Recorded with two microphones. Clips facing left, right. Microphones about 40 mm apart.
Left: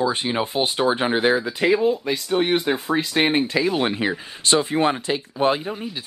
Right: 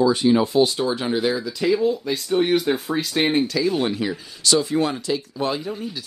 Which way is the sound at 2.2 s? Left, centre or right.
Left.